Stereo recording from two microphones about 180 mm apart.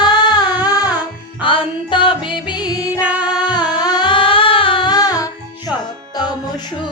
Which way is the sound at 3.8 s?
25° left (ahead or behind).